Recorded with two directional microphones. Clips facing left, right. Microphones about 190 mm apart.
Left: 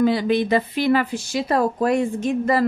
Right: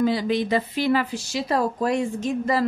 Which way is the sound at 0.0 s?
60° left (ahead or behind).